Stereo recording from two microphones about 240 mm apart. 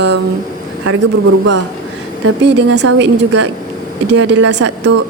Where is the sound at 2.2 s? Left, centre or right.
Right.